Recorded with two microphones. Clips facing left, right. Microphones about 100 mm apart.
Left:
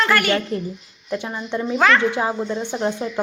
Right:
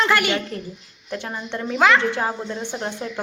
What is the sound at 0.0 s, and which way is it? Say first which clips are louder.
Speech: left 1 dB; 15° right (ahead or behind).